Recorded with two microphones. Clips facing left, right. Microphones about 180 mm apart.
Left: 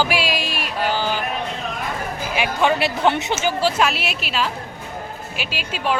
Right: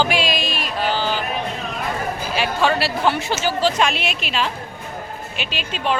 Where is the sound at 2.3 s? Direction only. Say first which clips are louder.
Left 1 dB; 15° left (ahead or behind).